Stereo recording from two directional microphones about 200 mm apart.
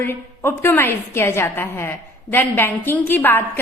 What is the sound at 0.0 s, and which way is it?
A woman's voice, 10° left (ahead or behind).